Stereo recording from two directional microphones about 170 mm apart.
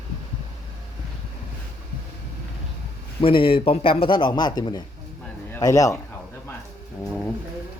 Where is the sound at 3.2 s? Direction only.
30° left (ahead or behind).